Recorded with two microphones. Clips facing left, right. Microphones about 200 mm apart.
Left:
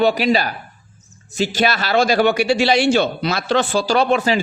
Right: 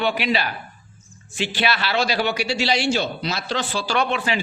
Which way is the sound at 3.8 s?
40° left (ahead or behind).